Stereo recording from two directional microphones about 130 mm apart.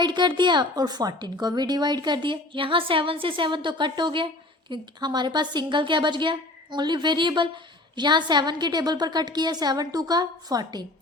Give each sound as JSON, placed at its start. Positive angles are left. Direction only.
{"t": 0.0, "sound": "a woman's voice", "side_deg": -35}